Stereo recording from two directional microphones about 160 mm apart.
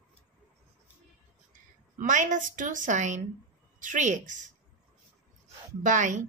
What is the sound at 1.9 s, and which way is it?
Speech, 55° right (ahead or behind).